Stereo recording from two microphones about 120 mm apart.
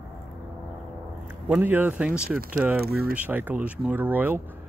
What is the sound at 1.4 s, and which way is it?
Speech, 15° right (ahead or behind).